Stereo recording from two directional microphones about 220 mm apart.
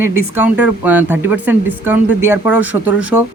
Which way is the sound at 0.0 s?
10° right (ahead or behind).